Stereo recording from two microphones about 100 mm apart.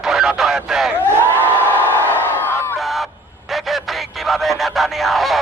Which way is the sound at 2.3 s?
20° left (ahead or behind).